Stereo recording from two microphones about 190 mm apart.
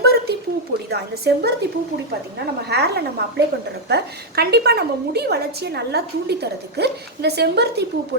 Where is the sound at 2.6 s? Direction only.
60° right (ahead or behind).